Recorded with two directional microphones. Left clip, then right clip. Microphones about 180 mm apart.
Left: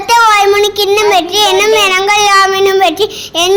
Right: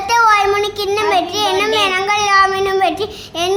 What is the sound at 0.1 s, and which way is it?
Child singing, 30° left (ahead or behind).